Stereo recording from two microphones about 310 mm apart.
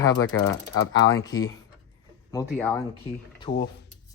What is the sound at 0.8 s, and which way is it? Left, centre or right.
Mechanisms, left.